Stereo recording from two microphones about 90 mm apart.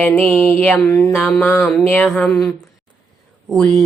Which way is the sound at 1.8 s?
20° left (ahead or behind).